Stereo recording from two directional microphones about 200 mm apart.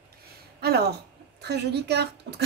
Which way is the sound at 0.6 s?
55° right (ahead or behind).